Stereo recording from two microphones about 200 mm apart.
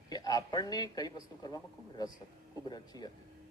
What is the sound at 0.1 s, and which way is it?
A man's voice, 20° left (ahead or behind).